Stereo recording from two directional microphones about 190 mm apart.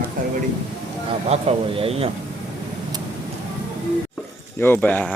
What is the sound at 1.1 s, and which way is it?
A man's voice, 30° right (ahead or behind).